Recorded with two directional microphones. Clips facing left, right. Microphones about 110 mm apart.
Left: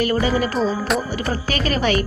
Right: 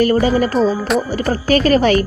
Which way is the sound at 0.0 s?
40° right (ahead or behind).